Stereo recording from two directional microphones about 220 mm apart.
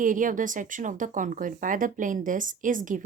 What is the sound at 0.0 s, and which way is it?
Speech, 35° right (ahead or behind).